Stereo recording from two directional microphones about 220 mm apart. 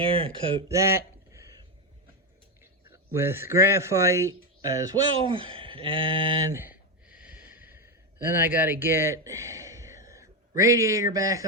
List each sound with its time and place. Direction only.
0.0 s speech: 25° right (ahead or behind)
3.2 s a man's voice: 10° right (ahead or behind)
6.5 s a sound: 10° right (ahead or behind)
8.3 s a man's voice: 10° right (ahead or behind)